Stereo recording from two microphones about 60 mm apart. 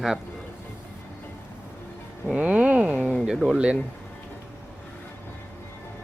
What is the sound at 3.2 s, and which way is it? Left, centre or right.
Speech, centre.